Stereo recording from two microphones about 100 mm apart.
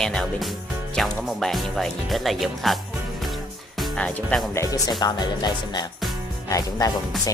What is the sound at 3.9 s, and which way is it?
Speech, 10° left (ahead or behind).